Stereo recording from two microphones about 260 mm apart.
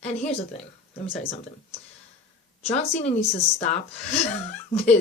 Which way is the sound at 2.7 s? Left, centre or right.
Left.